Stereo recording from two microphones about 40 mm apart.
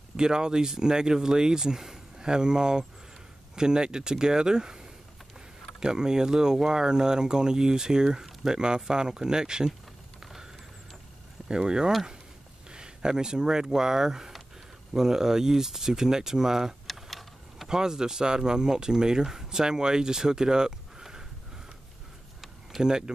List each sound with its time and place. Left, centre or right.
0.2 s speech: centre
10.2 s a sound: centre
11.4 s speech: centre
16.8 s vehicle: centre
17.6 s speech: centre
21.0 s sniff: centre
22.8 s speech: centre